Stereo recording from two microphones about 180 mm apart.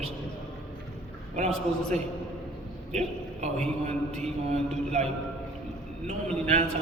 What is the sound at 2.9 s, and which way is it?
Speech, 40° right (ahead or behind).